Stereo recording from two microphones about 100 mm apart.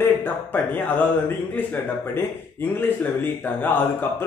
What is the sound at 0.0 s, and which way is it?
Speech, 20° left (ahead or behind).